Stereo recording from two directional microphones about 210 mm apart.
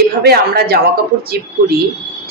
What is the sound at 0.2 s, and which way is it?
Speech, 45° right (ahead or behind).